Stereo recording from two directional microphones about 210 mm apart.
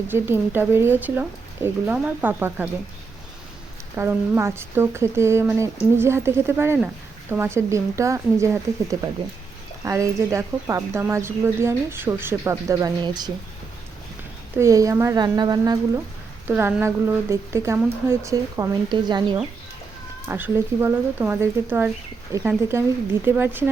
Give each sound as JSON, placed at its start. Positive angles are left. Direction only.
{"t": 0.1, "sound": "speech", "side_deg": -10}
{"t": 3.9, "sound": "speech", "side_deg": -10}
{"t": 14.5, "sound": "speech", "side_deg": -15}
{"t": 20.2, "sound": "speech", "side_deg": -10}